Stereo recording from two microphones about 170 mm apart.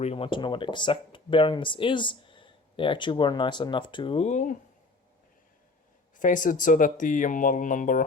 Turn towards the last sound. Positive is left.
turn(degrees=50)  # may be behind; listen again after turning